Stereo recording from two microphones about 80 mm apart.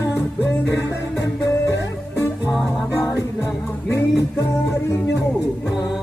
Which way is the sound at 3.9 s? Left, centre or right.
Left.